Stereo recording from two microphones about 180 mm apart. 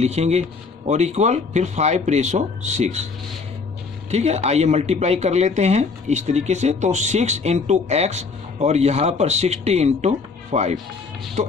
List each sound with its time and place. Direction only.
0.0 s speech: 40° right (ahead or behind)
4.1 s speech: 35° right (ahead or behind)